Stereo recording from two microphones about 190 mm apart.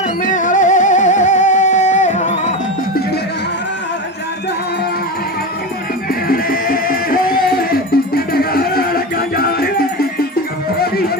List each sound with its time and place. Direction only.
0.2 s music: 45° left (ahead or behind)
6.2 s music: 50° left (ahead or behind)